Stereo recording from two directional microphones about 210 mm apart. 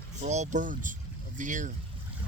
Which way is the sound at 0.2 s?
35° right (ahead or behind).